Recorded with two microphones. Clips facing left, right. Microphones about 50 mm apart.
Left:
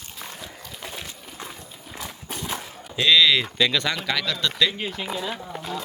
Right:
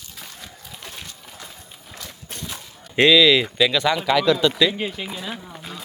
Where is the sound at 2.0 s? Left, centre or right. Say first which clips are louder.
Left 4 dB; centre.